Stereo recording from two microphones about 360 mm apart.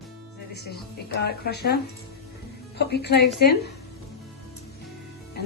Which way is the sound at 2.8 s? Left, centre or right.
Left.